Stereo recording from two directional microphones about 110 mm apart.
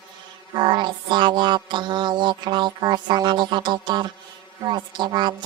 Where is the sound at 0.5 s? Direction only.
45° right (ahead or behind).